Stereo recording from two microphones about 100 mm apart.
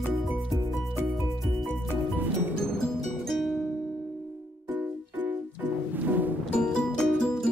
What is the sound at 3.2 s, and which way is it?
Music, centre (ahead or behind).